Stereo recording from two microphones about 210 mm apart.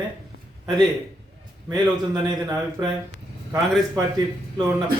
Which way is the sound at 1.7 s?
20° right (ahead or behind).